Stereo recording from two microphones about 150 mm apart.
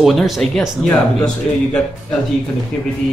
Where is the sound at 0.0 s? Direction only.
Centre (ahead or behind).